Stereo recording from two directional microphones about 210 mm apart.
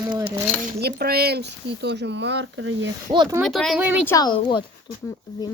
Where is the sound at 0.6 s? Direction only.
50° right (ahead or behind).